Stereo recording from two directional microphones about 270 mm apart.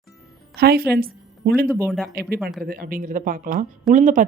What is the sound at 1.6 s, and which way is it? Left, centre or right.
Speech, centre.